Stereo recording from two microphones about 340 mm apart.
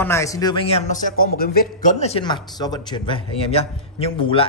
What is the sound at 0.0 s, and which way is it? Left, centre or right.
Speech, centre.